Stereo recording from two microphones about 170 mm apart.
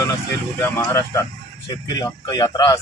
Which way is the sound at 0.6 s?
15° left (ahead or behind).